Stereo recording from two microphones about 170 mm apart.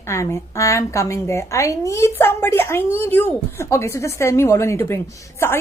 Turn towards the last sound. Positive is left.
turn(degrees=15)  # may be behind; listen again after turning